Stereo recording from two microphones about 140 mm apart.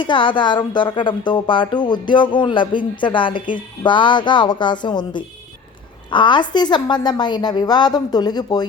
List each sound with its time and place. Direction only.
0.0 s speech: 35° left (ahead or behind)